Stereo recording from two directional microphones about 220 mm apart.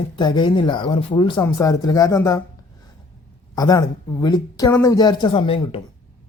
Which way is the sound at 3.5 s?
15° left (ahead or behind).